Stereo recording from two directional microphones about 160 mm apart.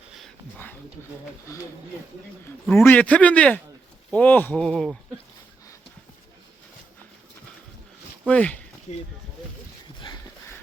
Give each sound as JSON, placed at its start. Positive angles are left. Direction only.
{"t": 1.5, "sound": "speech", "side_deg": 20}
{"t": 2.7, "sound": "a man's voice", "side_deg": 15}
{"t": 8.3, "sound": "a man's voice", "side_deg": 10}